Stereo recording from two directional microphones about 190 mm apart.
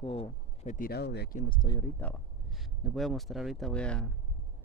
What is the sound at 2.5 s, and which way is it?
A man's voice, centre (ahead or behind).